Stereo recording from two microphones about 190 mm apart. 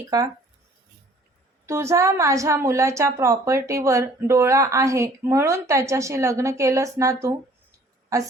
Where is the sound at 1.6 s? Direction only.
15° right (ahead or behind).